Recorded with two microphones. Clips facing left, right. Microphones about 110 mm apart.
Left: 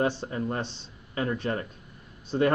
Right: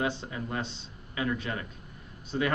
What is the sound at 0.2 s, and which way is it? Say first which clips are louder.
Speech: left 4 dB; 40° left (ahead or behind).